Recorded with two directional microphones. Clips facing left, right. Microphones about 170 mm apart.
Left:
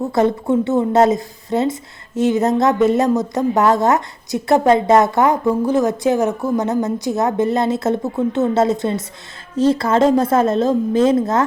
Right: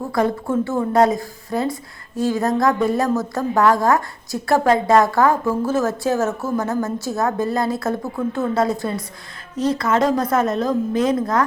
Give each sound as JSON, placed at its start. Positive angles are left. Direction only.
{"t": 0.1, "sound": "speech", "side_deg": 25}